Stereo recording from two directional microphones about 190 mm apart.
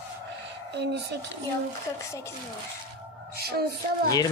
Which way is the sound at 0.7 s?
65° right (ahead or behind).